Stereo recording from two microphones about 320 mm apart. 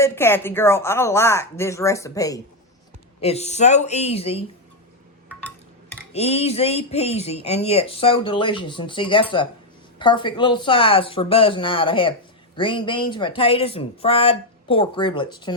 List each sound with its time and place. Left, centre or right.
0.0 s speech: centre
6.1 s speech: centre